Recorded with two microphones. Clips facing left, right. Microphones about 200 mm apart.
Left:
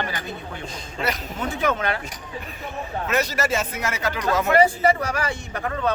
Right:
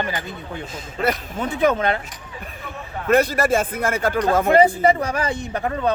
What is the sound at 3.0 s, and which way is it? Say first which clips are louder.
A man's voice: right 7 dB; 55° right (ahead or behind).